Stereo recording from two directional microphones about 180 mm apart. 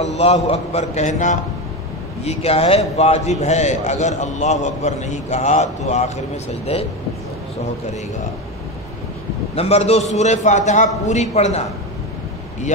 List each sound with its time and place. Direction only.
0.0 s a man's voice: 35° left (ahead or behind)
9.6 s a man's voice: 35° left (ahead or behind)